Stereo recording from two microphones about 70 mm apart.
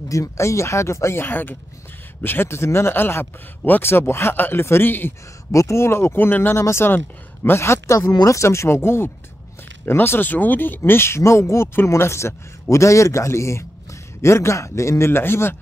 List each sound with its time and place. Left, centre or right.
0.1 s a man's voice: left
5.5 s a man's voice: left